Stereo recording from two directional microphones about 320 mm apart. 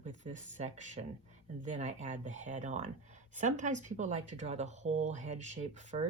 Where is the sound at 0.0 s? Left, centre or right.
Right.